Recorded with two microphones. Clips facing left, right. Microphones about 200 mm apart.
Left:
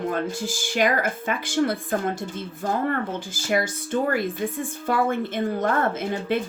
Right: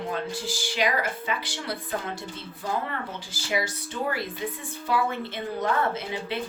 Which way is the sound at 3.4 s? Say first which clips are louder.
Left 4 dB; 50° left (ahead or behind).